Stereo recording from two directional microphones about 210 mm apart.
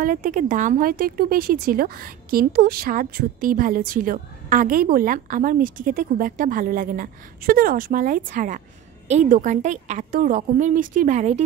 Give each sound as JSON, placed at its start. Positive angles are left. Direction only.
{"t": 0.0, "sound": "a woman's voice", "side_deg": -40}